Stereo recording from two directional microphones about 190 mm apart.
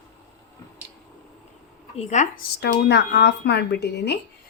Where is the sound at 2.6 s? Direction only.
65° left (ahead or behind).